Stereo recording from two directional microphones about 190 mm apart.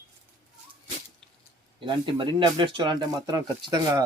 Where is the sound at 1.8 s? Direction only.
25° right (ahead or behind).